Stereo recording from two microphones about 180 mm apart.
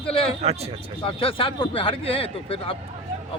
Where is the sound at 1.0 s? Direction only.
30° left (ahead or behind).